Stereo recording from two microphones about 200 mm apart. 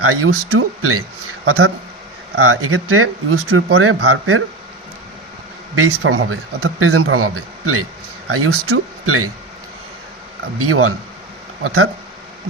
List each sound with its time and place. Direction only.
0.0 s speech: 90° right
5.7 s speech: 90° right
10.6 s speech: 90° right